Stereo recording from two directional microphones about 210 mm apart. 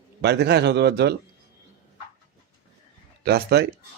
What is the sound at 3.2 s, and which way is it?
Speech, 50° right (ahead or behind).